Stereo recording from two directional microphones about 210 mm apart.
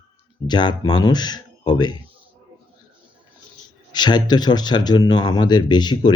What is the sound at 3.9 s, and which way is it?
A man's voice, 20° left (ahead or behind).